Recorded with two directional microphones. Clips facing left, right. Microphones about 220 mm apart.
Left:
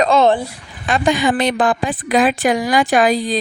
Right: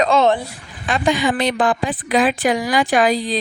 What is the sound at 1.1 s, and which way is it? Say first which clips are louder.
Speech: left 2 dB; 50° left (ahead or behind).